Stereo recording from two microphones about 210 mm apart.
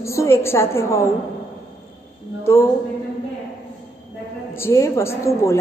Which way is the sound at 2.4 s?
10° left (ahead or behind).